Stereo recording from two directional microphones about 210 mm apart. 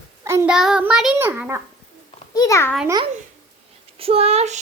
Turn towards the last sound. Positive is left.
turn(degrees=-30)  # may be behind; listen again after turning